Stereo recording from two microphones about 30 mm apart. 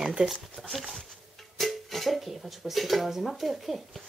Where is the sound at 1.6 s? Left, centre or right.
Centre.